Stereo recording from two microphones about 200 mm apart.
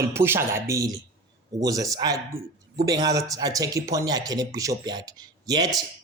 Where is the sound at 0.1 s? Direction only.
10° right (ahead or behind).